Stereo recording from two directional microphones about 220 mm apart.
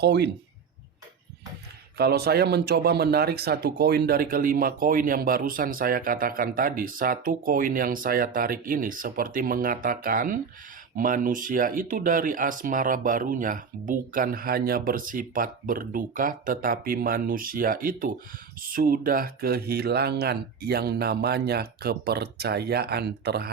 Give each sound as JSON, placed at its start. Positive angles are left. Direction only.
{"t": 0.0, "sound": "speech", "side_deg": -50}
{"t": 2.0, "sound": "speech", "side_deg": -45}